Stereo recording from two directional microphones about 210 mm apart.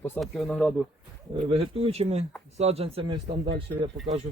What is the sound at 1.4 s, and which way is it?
Speech, 25° right (ahead or behind).